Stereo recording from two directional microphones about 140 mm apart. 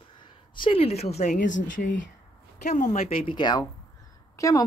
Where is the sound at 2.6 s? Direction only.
60° left (ahead or behind).